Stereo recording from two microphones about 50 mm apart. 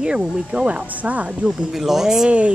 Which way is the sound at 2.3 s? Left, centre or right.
Right.